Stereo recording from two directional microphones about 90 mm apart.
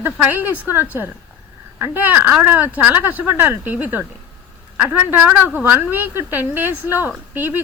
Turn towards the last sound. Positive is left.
turn(degrees=-20)  # may be behind; listen again after turning